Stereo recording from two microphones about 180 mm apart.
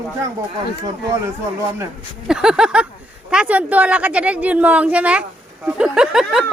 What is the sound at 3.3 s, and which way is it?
A woman's voice, 5° right (ahead or behind).